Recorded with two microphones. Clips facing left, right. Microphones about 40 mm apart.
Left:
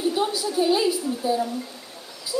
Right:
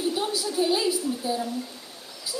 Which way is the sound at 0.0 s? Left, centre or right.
Centre.